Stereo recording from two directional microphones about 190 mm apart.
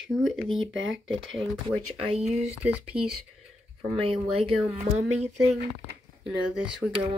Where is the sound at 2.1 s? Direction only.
35° right (ahead or behind).